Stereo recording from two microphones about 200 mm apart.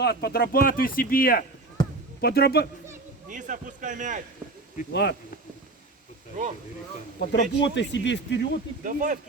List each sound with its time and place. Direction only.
0.0 s speech: 55° left (ahead or behind)
1.8 s basketball bounce: 20° left (ahead or behind)
2.2 s speech: 50° left (ahead or behind)
3.2 s speech: 40° right (ahead or behind)
4.9 s speech: 60° left (ahead or behind)
7.2 s speech: 60° left (ahead or behind)
8.8 s speech: 40° right (ahead or behind)